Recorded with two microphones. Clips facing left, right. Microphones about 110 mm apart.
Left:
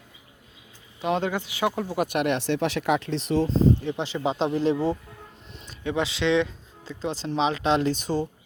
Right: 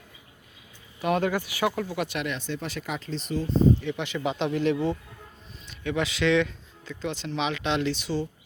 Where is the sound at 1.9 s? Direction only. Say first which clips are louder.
Left 6 dB; 45° left (ahead or behind); by 3.5 s 80° left.